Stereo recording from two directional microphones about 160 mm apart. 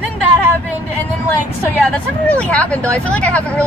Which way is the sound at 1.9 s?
10° left (ahead or behind).